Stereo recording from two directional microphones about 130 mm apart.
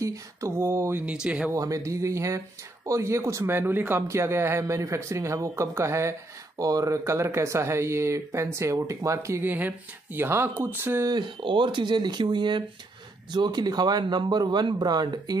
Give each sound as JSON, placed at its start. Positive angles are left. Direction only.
{"t": 0.0, "sound": "speech", "side_deg": -25}
{"t": 1.0, "sound": "speech", "side_deg": -10}
{"t": 1.5, "sound": "speech", "side_deg": -25}
{"t": 11.1, "sound": "speech", "side_deg": -35}